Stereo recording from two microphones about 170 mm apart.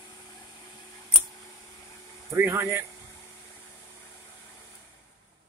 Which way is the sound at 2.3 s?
10° right (ahead or behind).